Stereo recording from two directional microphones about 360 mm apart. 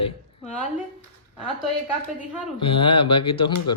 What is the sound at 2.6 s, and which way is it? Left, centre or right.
A man's voice, centre.